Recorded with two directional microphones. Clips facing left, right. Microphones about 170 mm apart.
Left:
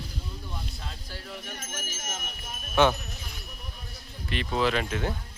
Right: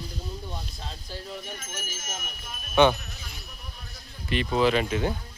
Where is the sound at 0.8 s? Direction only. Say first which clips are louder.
Right 2 dB; 25° right (ahead or behind).